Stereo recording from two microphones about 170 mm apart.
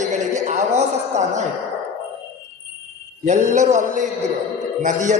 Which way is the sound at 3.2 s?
50° right (ahead or behind).